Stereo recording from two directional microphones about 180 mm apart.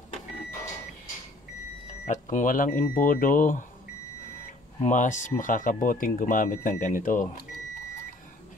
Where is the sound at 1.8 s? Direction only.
40° left (ahead or behind).